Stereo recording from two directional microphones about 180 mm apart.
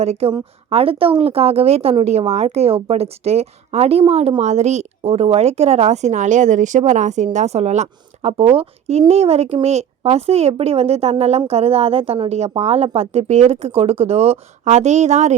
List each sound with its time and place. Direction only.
0.0 s a woman's voice: 35° right (ahead or behind)